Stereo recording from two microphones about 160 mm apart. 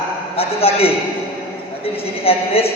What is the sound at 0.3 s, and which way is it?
A man's voice, 35° left (ahead or behind).